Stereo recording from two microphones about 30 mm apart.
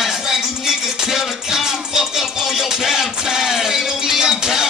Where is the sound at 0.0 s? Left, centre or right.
Centre.